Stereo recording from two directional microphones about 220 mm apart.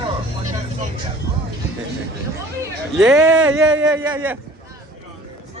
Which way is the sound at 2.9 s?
Centre (ahead or behind).